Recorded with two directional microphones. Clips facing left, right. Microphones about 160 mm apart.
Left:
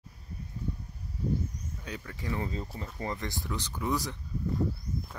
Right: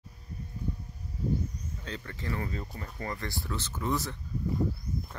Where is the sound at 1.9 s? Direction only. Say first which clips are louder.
Even; 10° left (ahead or behind).